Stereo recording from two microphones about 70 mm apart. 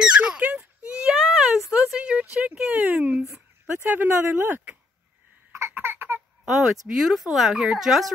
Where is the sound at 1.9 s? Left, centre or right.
Centre.